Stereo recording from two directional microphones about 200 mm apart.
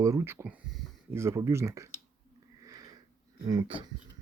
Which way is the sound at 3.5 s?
25° right (ahead or behind).